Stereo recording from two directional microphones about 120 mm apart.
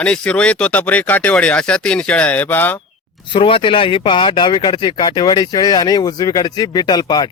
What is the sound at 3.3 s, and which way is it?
Speech, 45° left (ahead or behind).